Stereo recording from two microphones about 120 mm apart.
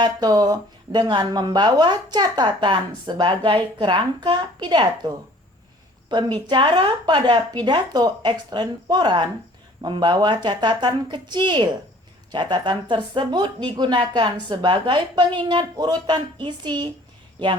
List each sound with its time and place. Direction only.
0.0 s speech: 35° right (ahead or behind)